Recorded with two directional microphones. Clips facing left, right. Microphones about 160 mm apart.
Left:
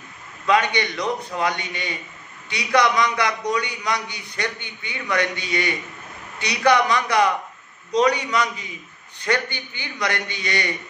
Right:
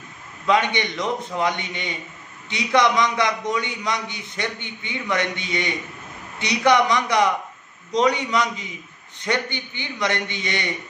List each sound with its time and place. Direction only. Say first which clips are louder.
0.5 s a man's voice: even; 20° right (ahead or behind)